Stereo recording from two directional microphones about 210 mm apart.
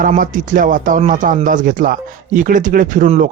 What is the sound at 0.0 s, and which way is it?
Speech, 40° right (ahead or behind).